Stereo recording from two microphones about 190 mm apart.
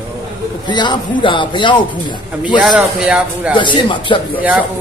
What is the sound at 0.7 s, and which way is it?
Speech, 25° left (ahead or behind).